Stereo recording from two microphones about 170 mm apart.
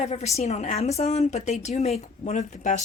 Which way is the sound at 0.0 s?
40° left (ahead or behind).